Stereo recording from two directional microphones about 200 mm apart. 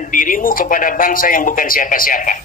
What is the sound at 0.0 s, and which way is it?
A man's voice, 40° left (ahead or behind).